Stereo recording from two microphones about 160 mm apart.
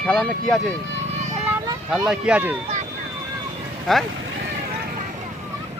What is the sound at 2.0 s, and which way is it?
Speech, 5° right (ahead or behind).